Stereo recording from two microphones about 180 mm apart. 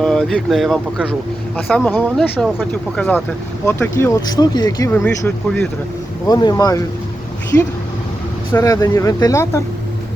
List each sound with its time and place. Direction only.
0.0 s speech: 5° left (ahead or behind)
3.7 s speech: 15° left (ahead or behind)
4.9 s speech: 10° left (ahead or behind)
8.5 s speech: 20° left (ahead or behind)